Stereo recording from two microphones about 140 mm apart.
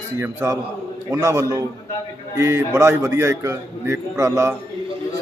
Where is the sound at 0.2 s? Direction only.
20° right (ahead or behind).